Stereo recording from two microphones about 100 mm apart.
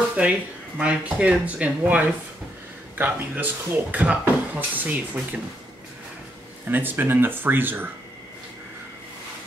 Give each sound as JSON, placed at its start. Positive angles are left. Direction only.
{"t": 0.2, "sound": "speech", "side_deg": -10}
{"t": 6.7, "sound": "speech", "side_deg": -20}